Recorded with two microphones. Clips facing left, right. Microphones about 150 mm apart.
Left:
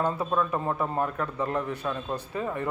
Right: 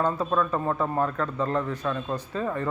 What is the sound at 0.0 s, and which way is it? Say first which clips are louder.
A man's voice: right 2 dB; 15° left (ahead or behind).